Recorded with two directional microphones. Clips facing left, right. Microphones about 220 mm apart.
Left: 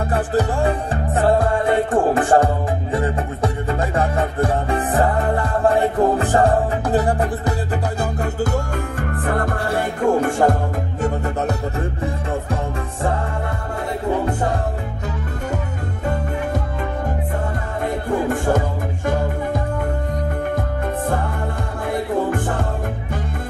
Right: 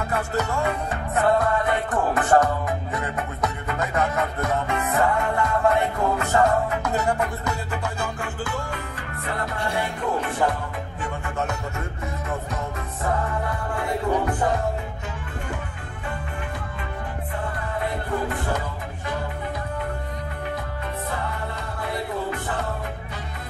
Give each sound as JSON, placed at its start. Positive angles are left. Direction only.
{"t": 0.1, "sound": "music", "side_deg": 30}
{"t": 17.8, "sound": "music", "side_deg": 45}
{"t": 21.9, "sound": "music", "side_deg": 50}